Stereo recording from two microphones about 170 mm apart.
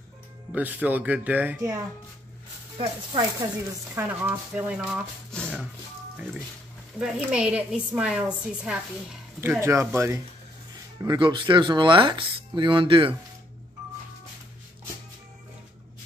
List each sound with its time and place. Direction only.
0.5 s speech: 10° right (ahead or behind)
2.8 s speech: 25° right (ahead or behind)
3.9 s speech: 10° right (ahead or behind)
7.0 s a woman's voice: 5° right (ahead or behind); by 13.1 s 30° right (ahead or behind)